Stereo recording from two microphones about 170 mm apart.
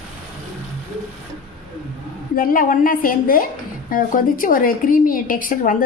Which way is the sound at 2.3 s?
55° left (ahead or behind).